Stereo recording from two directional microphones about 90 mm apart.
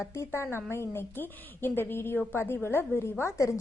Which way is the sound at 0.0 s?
30° left (ahead or behind).